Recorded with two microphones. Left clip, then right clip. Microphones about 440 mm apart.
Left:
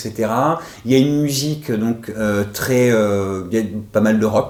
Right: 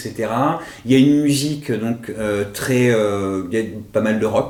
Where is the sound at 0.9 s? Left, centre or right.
Left.